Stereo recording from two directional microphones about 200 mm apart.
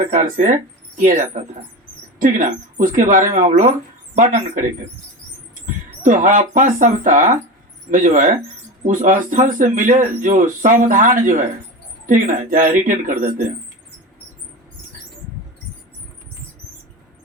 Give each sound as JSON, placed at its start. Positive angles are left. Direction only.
{"t": 0.1, "sound": "speech", "side_deg": -40}
{"t": 6.0, "sound": "speech", "side_deg": -40}